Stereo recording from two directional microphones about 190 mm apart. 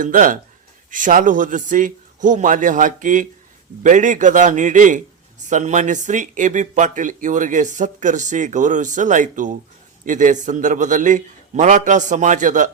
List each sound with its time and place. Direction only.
0.0 s speech: 45° right (ahead or behind)